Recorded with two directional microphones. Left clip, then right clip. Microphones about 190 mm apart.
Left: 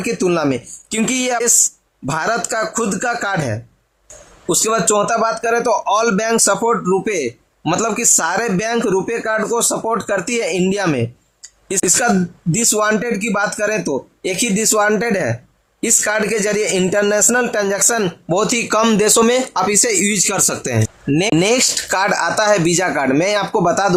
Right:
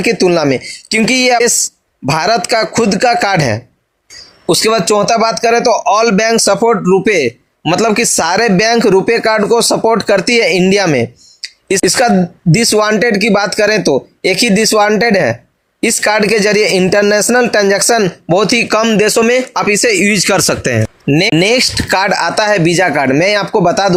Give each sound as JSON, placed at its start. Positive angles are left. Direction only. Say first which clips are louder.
{"t": 0.0, "sound": "speech", "louder": "right 7 dB", "side_deg": -10}